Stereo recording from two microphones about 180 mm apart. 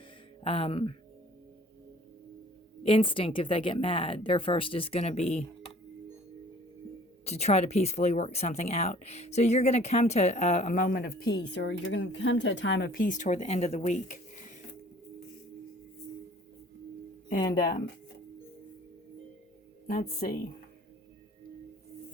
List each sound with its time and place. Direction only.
0.4 s speech: 30° left (ahead or behind)
2.8 s speech: 30° left (ahead or behind)
7.3 s speech: 35° left (ahead or behind); by 11.3 s 60° left (ahead or behind)
11.5 s speech: 75° left (ahead or behind); by 14.6 s 45° left (ahead or behind)
19.9 s speech: 50° left (ahead or behind)